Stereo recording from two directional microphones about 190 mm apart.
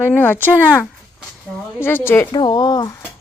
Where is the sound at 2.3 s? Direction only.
25° left (ahead or behind).